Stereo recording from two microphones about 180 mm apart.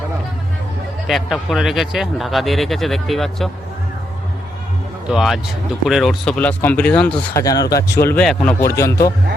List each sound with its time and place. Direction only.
1.0 s speech: centre (ahead or behind)
5.0 s speech: centre (ahead or behind)
7.4 s speech: 20° left (ahead or behind); by 8.5 s 5° left (ahead or behind)
8.6 s speech: 15° left (ahead or behind)